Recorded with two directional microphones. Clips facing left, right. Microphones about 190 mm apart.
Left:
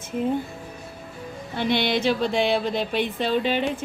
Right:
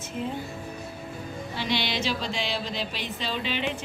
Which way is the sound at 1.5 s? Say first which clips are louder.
Left 7 dB; 55° left (ahead or behind).